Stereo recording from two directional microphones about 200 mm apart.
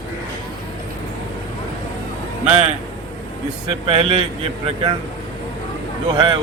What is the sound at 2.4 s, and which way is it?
Speech, 35° right (ahead or behind).